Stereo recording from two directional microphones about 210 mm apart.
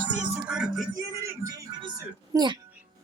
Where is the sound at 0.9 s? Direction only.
15° right (ahead or behind).